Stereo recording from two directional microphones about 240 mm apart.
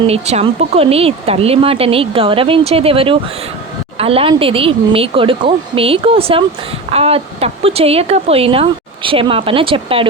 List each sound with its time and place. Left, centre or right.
0.1 s speech: right